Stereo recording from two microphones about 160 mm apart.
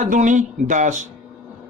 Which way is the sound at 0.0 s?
50° right (ahead or behind).